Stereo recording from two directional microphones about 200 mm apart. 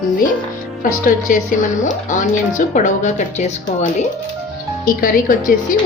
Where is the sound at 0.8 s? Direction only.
40° left (ahead or behind).